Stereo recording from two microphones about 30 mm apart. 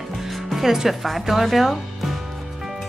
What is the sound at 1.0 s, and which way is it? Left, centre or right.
Speech, centre.